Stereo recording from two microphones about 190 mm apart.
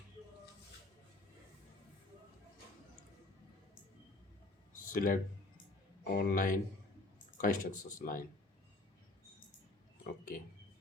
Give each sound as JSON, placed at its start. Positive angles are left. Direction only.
{"t": 4.9, "sound": "speech", "side_deg": 45}
{"t": 10.0, "sound": "speech", "side_deg": 50}